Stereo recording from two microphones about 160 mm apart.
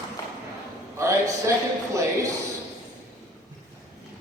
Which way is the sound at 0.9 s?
20° right (ahead or behind).